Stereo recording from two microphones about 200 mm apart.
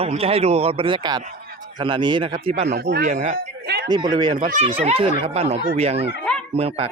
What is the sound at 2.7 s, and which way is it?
Speech, 55° right (ahead or behind).